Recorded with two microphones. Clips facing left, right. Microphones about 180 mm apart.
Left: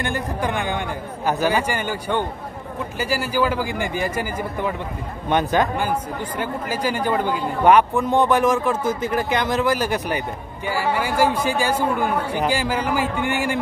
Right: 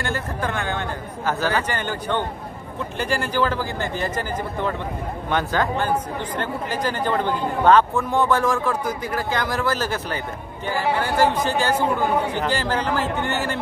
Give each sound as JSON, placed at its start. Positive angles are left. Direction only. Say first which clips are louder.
{"t": 0.0, "sound": "speech", "louder": "left 2 dB", "side_deg": 15}